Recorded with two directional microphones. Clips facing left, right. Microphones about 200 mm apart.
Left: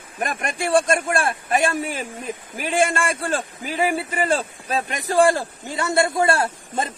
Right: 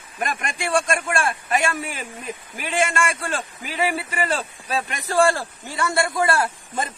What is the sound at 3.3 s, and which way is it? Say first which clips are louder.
Speech: left 4 dB; 45° left (ahead or behind).